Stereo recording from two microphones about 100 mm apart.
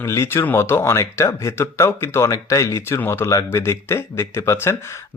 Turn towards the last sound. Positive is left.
turn(degrees=25)  # may be behind; listen again after turning